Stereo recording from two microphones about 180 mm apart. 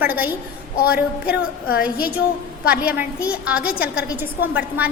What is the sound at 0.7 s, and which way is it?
Speech, 55° left (ahead or behind).